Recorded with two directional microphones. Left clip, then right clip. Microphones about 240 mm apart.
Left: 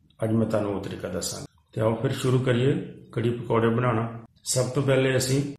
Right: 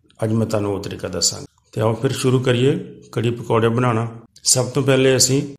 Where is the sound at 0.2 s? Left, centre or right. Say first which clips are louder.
Right 4 dB; right.